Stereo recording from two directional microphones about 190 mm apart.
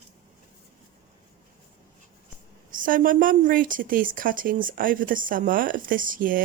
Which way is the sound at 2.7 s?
45° right (ahead or behind).